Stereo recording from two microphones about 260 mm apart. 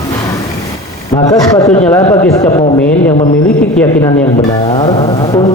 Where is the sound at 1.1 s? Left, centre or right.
Centre.